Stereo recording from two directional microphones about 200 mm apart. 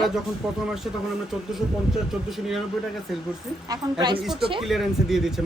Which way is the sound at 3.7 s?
20° right (ahead or behind).